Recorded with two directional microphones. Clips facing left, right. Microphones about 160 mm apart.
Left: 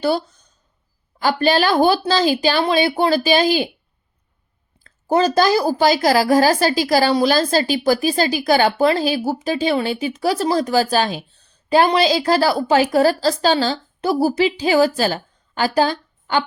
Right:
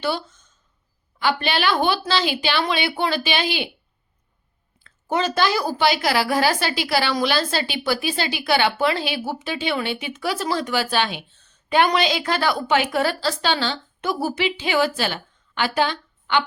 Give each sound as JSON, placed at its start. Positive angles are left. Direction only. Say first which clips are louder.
{"t": 0.0, "sound": "a woman's voice", "louder": "left 6 dB", "side_deg": 40}
{"t": 4.8, "sound": "a woman's voice", "louder": "left 6 dB", "side_deg": 40}